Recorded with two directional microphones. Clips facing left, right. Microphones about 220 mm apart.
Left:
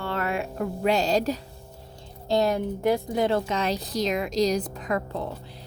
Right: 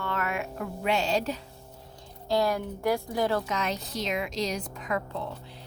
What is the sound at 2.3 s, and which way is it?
Speech, 25° left (ahead or behind).